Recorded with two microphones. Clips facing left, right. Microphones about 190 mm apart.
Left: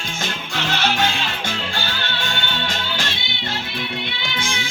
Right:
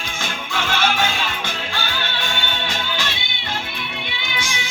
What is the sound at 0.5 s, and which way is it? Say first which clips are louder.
Music: right 1 dB; 50° right (ahead or behind).